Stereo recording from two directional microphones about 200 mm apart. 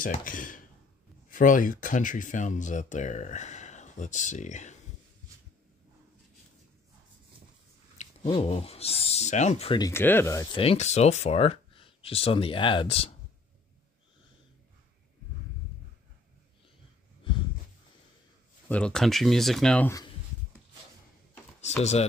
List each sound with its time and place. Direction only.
0.0 s speech: 40° left (ahead or behind)
8.0 s speech: 30° left (ahead or behind)
9.8 s speech: 15° left (ahead or behind)
10.5 s speech: 30° left (ahead or behind)
18.7 s speech: 5° left (ahead or behind)
19.9 s speech: 20° left (ahead or behind)